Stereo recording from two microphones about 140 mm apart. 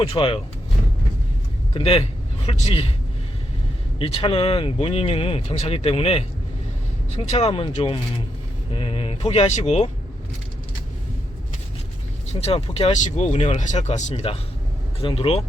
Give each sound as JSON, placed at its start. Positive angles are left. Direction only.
{"t": 0.1, "sound": "speech", "side_deg": 40}
{"t": 1.7, "sound": "speech", "side_deg": 40}
{"t": 3.9, "sound": "speech", "side_deg": 40}
{"t": 7.3, "sound": "speech", "side_deg": 45}
{"t": 12.3, "sound": "speech", "side_deg": 45}